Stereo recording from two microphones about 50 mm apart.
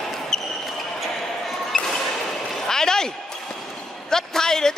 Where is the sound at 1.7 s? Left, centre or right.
Centre.